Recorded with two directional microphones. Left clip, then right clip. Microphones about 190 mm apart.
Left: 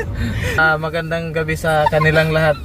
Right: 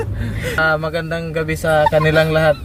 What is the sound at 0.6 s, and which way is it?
Speech, 20° right (ahead or behind).